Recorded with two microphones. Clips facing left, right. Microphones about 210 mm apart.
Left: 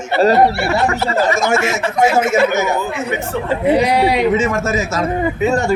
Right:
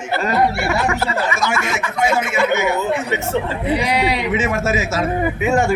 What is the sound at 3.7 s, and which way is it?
Speech, 45° left (ahead or behind).